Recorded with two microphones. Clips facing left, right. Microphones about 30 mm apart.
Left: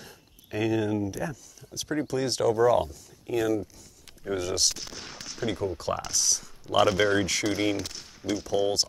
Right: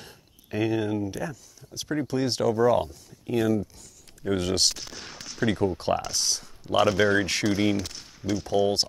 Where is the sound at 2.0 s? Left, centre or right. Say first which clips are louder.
Even; centre.